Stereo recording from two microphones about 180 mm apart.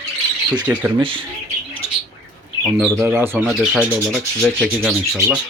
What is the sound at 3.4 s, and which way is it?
Rub, 5° right (ahead or behind).